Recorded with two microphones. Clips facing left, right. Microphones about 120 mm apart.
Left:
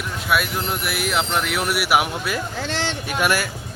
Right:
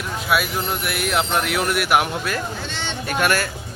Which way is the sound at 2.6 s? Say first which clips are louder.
Left 5 dB; 90° left.